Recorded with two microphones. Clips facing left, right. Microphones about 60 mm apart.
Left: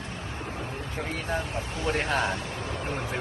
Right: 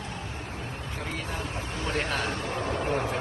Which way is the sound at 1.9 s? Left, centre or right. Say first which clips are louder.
Left 3 dB; left.